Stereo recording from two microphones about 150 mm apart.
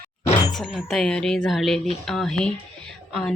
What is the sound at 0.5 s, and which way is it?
Speech, centre (ahead or behind).